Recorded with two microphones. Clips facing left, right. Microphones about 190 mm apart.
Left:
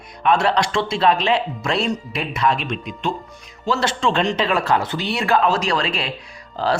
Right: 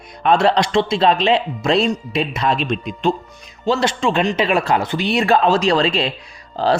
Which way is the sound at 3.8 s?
10° right (ahead or behind).